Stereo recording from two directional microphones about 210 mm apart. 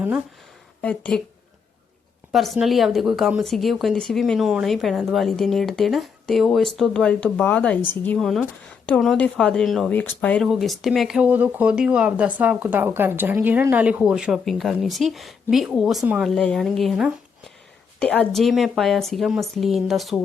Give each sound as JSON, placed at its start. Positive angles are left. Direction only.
{"t": 0.8, "sound": "speech", "side_deg": 5}
{"t": 2.3, "sound": "speech", "side_deg": 0}